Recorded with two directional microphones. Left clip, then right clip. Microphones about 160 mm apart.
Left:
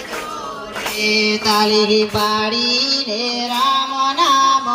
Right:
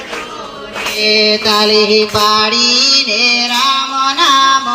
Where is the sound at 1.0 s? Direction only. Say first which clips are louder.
Right 6 dB; 35° left (ahead or behind); by 4.6 s 15° left (ahead or behind).